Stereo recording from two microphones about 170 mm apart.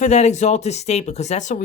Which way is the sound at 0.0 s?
45° left (ahead or behind).